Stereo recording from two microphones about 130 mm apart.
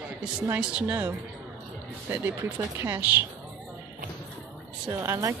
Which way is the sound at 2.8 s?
20° right (ahead or behind).